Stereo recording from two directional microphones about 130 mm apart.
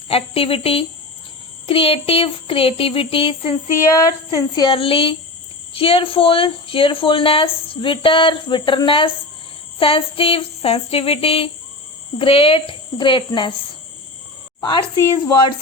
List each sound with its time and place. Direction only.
0.1 s a woman's voice: 45° left (ahead or behind)
3.9 s a woman's voice: 30° left (ahead or behind)
4.7 s a woman's voice: 45° left (ahead or behind)
14.6 s a woman's voice: 40° left (ahead or behind)